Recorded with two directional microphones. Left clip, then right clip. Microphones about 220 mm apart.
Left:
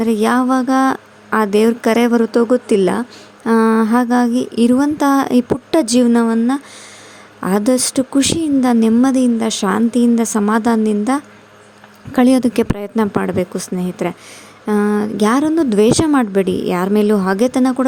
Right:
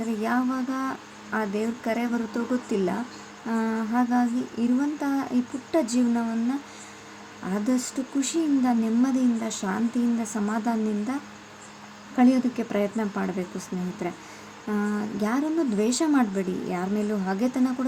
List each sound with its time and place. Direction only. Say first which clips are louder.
0.0 s a woman's voice: left 12 dB; 50° left (ahead or behind)